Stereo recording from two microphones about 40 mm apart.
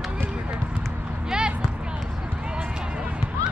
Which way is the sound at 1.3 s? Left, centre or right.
Centre.